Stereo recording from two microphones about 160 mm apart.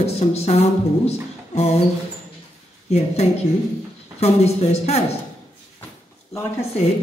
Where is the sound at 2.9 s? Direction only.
40° left (ahead or behind).